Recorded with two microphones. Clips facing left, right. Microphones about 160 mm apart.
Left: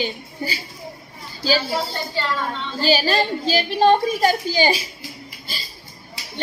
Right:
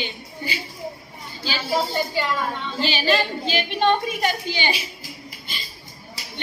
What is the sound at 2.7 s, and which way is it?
A woman's voice, 40° left (ahead or behind).